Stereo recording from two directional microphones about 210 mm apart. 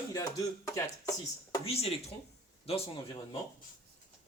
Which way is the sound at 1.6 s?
30° left (ahead or behind).